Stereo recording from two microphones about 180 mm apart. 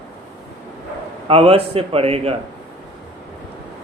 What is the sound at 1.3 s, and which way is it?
A man's voice, 30° right (ahead or behind).